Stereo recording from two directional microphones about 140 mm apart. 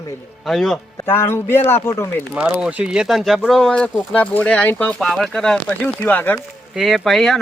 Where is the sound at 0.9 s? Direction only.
15° left (ahead or behind).